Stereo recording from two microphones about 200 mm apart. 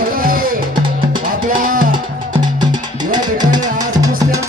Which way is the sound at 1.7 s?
45° right (ahead or behind).